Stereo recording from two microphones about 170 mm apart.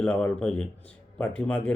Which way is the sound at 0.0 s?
5° left (ahead or behind).